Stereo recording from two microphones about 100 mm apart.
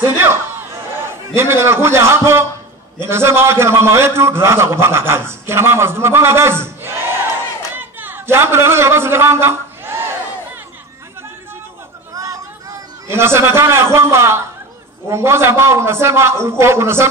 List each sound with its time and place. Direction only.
0.0 s a man's voice: 25° right (ahead or behind)
7.7 s a sound: 20° right (ahead or behind)
12.1 s chatter: 35° right (ahead or behind)
13.1 s a man's voice: 25° right (ahead or behind)